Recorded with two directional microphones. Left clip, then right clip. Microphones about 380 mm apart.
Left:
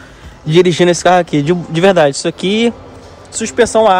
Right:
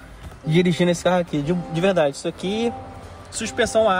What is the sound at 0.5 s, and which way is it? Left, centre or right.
A man's voice, left.